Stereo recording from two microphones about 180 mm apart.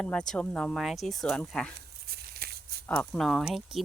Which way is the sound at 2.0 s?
60° right (ahead or behind).